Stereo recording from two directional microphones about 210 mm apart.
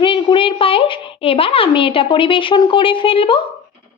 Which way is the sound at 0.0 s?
25° left (ahead or behind).